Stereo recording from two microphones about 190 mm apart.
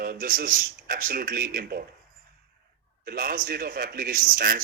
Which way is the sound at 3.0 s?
50° right (ahead or behind).